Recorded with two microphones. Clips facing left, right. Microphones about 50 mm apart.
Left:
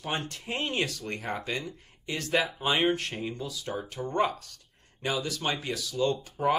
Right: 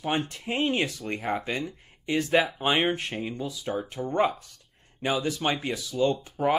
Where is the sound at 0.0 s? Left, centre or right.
Centre.